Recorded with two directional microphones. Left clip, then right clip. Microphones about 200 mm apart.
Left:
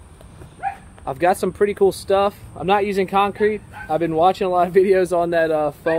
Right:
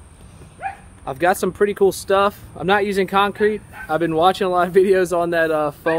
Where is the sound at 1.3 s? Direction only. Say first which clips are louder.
Even; 15° right (ahead or behind).